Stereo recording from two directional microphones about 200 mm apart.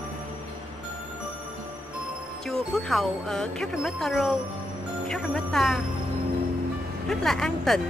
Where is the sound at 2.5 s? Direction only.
Centre (ahead or behind).